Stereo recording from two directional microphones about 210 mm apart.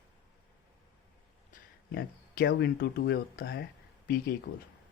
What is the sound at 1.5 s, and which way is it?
Speech, 45° left (ahead or behind).